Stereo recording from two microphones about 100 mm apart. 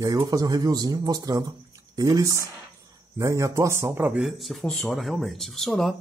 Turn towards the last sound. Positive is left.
turn(degrees=0)  # may be behind; listen again after turning